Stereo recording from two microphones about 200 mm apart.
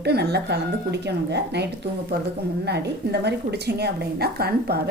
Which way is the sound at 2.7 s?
55° right (ahead or behind).